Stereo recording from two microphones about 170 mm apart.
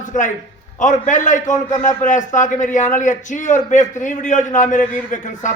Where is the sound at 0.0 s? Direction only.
50° left (ahead or behind).